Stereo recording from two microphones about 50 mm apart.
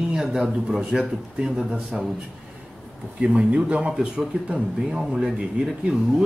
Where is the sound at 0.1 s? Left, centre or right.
Centre.